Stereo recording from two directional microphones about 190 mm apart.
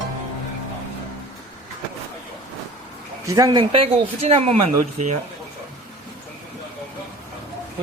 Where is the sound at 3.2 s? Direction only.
20° right (ahead or behind).